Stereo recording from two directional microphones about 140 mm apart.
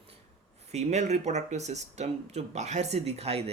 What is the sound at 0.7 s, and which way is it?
Speech, 55° right (ahead or behind).